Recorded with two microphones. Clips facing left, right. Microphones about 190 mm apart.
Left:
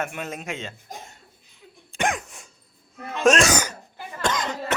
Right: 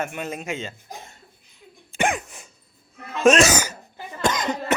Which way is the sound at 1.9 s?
Centre (ahead or behind).